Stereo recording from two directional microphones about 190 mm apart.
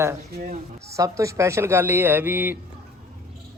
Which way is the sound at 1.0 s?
15° right (ahead or behind).